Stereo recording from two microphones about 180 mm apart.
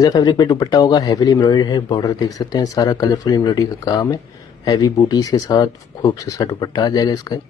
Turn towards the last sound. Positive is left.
turn(degrees=20)  # may be behind; listen again after turning